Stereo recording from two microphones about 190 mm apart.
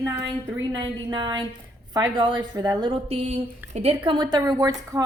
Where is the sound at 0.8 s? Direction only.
20° right (ahead or behind).